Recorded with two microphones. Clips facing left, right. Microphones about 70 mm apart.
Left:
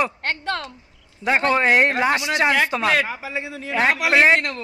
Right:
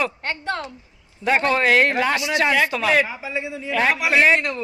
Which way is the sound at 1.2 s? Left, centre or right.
Centre.